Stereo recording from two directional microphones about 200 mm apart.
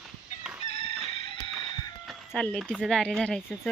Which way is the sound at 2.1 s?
5° left (ahead or behind).